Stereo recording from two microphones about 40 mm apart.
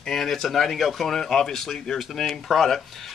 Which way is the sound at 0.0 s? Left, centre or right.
Centre.